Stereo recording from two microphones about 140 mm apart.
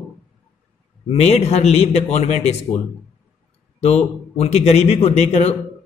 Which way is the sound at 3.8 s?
50° left (ahead or behind).